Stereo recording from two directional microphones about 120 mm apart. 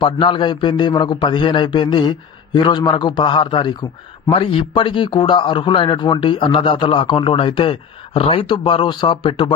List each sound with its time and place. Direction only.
0.0 s a man's voice: 40° left (ahead or behind)